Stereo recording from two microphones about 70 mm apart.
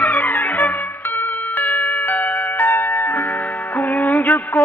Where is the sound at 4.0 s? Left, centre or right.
Centre.